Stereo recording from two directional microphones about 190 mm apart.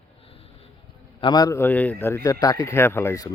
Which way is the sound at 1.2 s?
20° left (ahead or behind).